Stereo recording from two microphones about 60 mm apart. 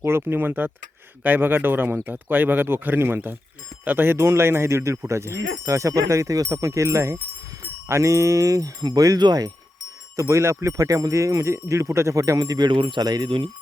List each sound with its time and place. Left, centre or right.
0.0 s speech: right
10.2 s speech: right